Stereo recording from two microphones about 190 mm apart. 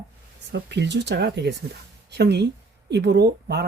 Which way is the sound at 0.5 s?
65° right (ahead or behind).